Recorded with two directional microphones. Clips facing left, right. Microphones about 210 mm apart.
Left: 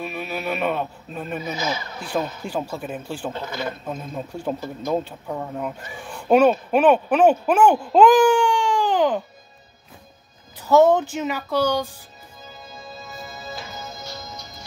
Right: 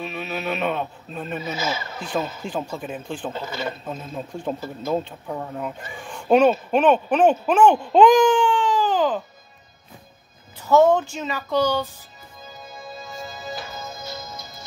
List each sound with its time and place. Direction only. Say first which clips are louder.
0.0 s speech: even; 10° left (ahead or behind)
11.0 s speech: left 3 dB; 10° left (ahead or behind)
13.6 s music: right 1 dB; 15° left (ahead or behind)